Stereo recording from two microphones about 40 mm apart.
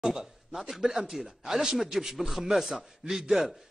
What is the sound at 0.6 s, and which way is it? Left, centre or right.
A man's voice, centre.